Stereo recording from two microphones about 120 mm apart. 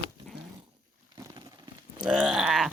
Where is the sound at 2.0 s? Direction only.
5° right (ahead or behind).